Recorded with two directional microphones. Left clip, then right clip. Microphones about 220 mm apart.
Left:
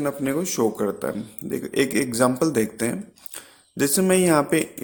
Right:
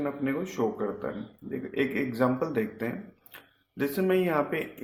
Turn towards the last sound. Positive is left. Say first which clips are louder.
# left 7 dB
turn(degrees=45)  # may be behind; listen again after turning